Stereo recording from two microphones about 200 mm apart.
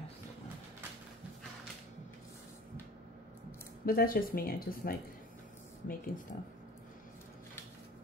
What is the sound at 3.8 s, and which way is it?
Speech, 45° left (ahead or behind).